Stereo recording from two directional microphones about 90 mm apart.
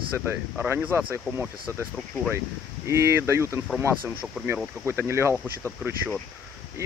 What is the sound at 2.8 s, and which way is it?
Speech, 30° right (ahead or behind).